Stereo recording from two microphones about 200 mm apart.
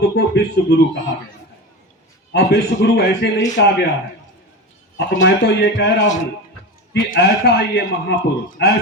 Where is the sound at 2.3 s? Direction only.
55° left (ahead or behind).